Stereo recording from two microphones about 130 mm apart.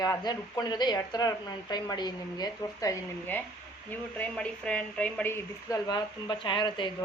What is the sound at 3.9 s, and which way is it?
Speech, 10° left (ahead or behind).